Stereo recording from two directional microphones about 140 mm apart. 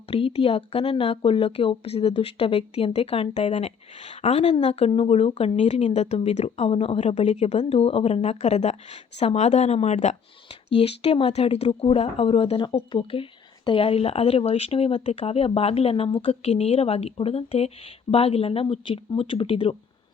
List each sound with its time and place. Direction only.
0.1 s speech: 40° left (ahead or behind)